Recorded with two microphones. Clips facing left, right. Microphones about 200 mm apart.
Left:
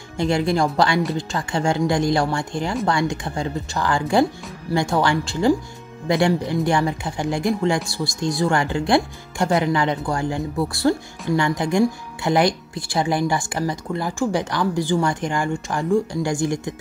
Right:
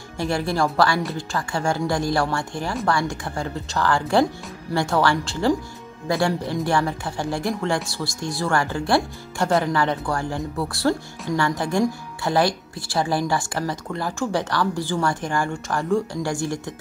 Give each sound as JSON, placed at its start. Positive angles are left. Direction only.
{"t": 0.2, "sound": "speech", "side_deg": 20}